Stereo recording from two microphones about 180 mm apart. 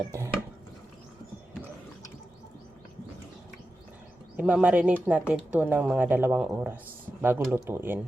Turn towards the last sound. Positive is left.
turn(degrees=-10)  # may be behind; listen again after turning